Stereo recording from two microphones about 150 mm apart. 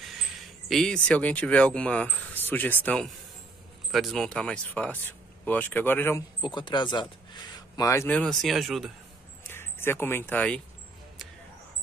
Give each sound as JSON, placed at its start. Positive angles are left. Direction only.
{"t": 0.0, "sound": "speech", "side_deg": 0}
{"t": 6.4, "sound": "speech", "side_deg": 30}
{"t": 8.2, "sound": "speech", "side_deg": 0}
{"t": 9.4, "sound": "speech", "side_deg": 15}